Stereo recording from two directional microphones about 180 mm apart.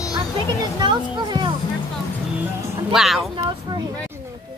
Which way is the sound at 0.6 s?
25° right (ahead or behind).